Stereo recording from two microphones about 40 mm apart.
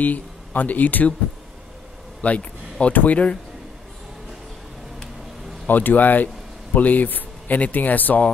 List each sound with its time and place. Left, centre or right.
0.0 s speech: left
2.2 s a man's voice: left
5.7 s a man's voice: left